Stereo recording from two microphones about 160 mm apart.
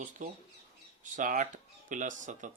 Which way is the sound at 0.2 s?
50° right (ahead or behind).